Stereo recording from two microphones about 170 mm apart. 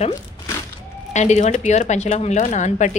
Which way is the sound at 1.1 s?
45° left (ahead or behind).